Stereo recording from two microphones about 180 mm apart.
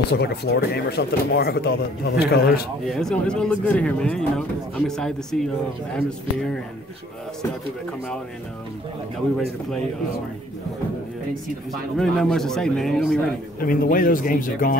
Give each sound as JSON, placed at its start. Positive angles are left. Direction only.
{"t": 0.1, "sound": "speech", "side_deg": 65}
{"t": 2.9, "sound": "a man's voice", "side_deg": 5}
{"t": 11.7, "sound": "a man's voice", "side_deg": 0}
{"t": 13.6, "sound": "speech", "side_deg": 50}